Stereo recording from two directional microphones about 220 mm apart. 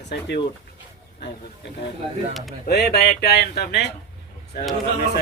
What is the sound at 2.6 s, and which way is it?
Speech, 45° left (ahead or behind).